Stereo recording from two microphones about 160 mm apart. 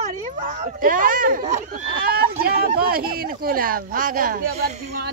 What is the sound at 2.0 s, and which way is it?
Speech, 70° right (ahead or behind).